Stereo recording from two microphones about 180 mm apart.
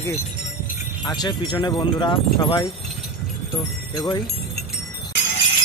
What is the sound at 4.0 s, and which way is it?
Speech, 20° left (ahead or behind).